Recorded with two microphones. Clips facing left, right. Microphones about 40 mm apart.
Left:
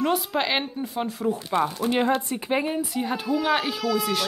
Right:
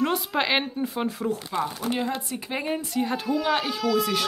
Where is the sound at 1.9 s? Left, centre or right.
Left.